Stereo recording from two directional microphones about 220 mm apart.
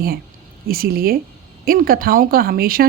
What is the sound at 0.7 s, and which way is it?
A woman's voice, 40° right (ahead or behind).